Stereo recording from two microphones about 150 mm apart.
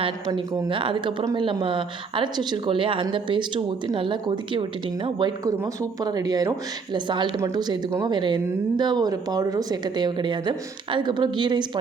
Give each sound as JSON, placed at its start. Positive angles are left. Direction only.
{"t": 0.0, "sound": "speech", "side_deg": -35}
{"t": 1.2, "sound": "a woman's voice", "side_deg": -25}
{"t": 1.6, "sound": "a woman's voice", "side_deg": -35}